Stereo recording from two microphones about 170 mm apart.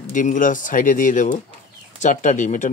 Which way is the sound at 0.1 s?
50° left (ahead or behind).